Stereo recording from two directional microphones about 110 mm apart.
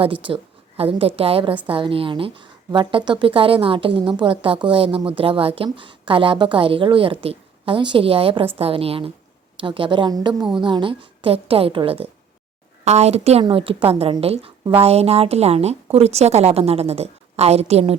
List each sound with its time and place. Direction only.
0.0 s a woman's voice: 50° right (ahead or behind)
9.6 s a woman's voice: 50° right (ahead or behind)
12.8 s a woman's voice: 85° right
13.4 s a woman's voice: 55° right (ahead or behind); by 17.9 s 70° right (ahead or behind)